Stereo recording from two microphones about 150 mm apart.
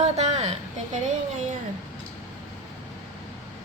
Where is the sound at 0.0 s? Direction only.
45° right (ahead or behind).